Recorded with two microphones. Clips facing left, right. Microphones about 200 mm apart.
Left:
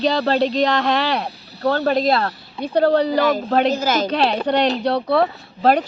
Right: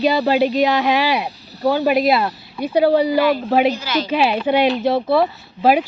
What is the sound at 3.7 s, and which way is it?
Speech, 45° left (ahead or behind).